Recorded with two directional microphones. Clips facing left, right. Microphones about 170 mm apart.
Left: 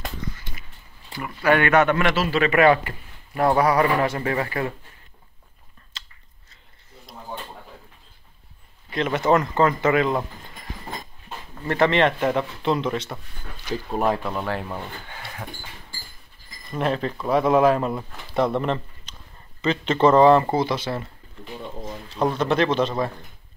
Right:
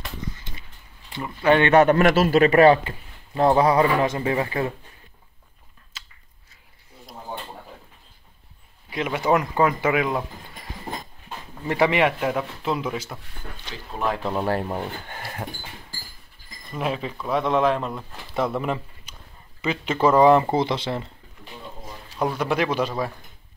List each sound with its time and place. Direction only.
1.1 s speech: 25° right (ahead or behind)
2.8 s speech: 20° right (ahead or behind)
5.9 s chewing: 5° right (ahead or behind)
8.9 s speech: 10° right (ahead or behind)
11.6 s speech: 10° right (ahead or behind)
14.2 s speech: 25° right (ahead or behind)
15.0 s a sound: 45° right (ahead or behind)
16.7 s speech: 5° right (ahead or behind); by 21.1 s 20° right (ahead or behind)
22.2 s speech: 10° right (ahead or behind)